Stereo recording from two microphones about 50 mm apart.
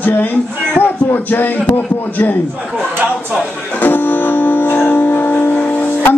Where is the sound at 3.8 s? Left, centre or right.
Left.